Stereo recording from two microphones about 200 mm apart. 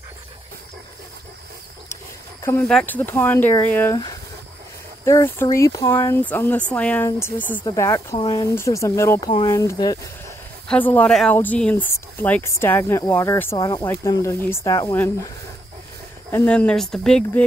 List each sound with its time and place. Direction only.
2.4 s speech: 5° left (ahead or behind)
5.0 s speech: 15° left (ahead or behind)
16.3 s speech: 10° left (ahead or behind)